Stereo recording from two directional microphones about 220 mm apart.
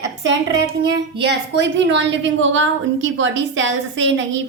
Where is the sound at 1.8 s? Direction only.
50° right (ahead or behind).